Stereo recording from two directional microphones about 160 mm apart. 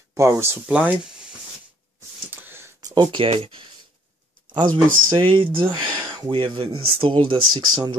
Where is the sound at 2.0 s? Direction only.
15° right (ahead or behind); by 3.6 s 35° right (ahead or behind).